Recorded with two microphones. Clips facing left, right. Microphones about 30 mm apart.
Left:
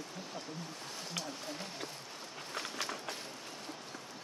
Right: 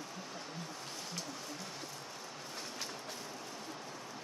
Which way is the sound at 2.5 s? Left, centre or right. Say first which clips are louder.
Left 6 dB; left.